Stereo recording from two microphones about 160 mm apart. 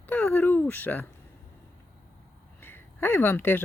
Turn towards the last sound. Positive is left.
turn(degrees=15)  # may be behind; listen again after turning